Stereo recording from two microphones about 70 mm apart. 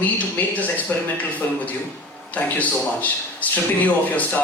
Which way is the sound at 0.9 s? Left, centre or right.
Left.